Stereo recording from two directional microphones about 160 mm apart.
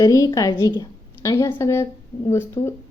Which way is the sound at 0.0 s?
25° left (ahead or behind).